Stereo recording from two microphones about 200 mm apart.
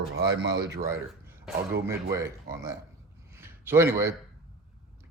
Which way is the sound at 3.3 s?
10° right (ahead or behind).